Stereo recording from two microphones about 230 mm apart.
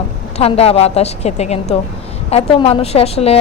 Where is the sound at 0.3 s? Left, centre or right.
Left.